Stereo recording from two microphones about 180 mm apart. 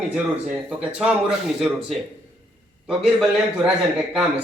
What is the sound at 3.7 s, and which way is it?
Speech, 5° right (ahead or behind).